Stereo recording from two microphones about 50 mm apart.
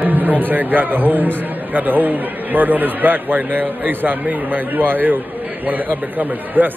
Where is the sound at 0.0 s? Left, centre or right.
Right.